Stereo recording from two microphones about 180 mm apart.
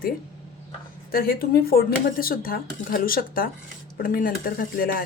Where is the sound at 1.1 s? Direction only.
55° left (ahead or behind).